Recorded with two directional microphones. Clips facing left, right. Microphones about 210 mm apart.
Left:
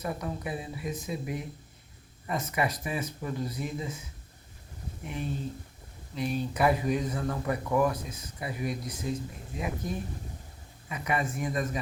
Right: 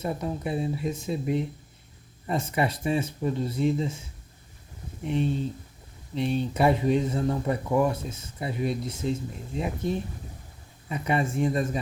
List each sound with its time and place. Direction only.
0.0 s speech: 25° right (ahead or behind)
5.0 s speech: 30° right (ahead or behind)